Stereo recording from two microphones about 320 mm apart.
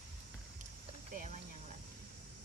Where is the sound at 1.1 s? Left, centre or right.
Right.